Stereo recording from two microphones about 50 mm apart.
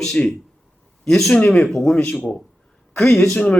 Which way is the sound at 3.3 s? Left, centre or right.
Left.